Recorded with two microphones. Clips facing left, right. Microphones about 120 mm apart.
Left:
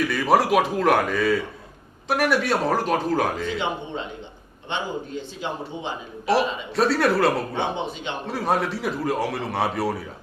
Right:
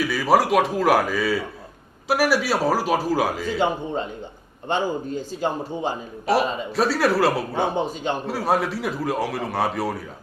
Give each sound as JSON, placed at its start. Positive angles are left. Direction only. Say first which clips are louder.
{"t": 0.0, "sound": "a man's voice", "louder": "right 1 dB", "side_deg": 0}
{"t": 3.6, "sound": "a man's voice", "louder": "right 5 dB", "side_deg": -45}
{"t": 6.3, "sound": "a man's voice", "louder": "right 1 dB", "side_deg": 0}
{"t": 7.8, "sound": "speech", "louder": "right 5 dB", "side_deg": -40}
{"t": 8.3, "sound": "a man's voice", "louder": "even", "side_deg": 0}